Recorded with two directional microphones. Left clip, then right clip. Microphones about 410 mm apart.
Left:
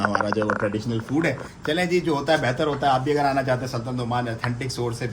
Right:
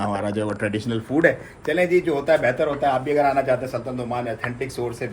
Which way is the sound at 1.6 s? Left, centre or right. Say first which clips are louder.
Right 3 dB; centre.